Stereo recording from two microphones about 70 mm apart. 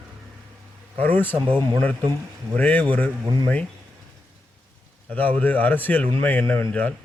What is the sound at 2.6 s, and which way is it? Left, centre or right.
Speech, left.